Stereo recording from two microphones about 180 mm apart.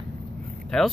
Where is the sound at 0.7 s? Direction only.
5° left (ahead or behind).